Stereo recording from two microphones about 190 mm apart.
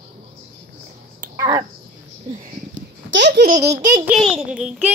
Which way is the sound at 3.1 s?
65° right (ahead or behind).